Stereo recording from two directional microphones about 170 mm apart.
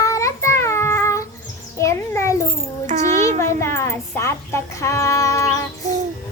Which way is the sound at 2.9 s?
40° right (ahead or behind).